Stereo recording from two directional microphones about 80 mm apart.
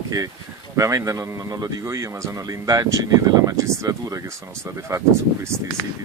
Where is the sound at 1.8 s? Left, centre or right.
Right.